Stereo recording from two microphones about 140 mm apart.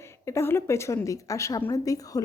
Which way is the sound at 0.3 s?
20° left (ahead or behind).